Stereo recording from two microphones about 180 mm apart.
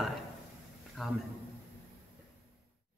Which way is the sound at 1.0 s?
Centre (ahead or behind).